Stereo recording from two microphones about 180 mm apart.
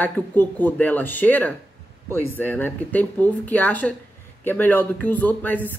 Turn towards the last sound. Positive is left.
turn(degrees=10)  # may be behind; listen again after turning